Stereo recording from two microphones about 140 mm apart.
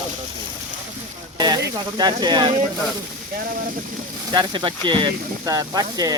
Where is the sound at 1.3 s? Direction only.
30° right (ahead or behind).